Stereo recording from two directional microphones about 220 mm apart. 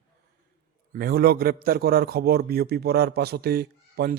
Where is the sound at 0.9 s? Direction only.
45° right (ahead or behind).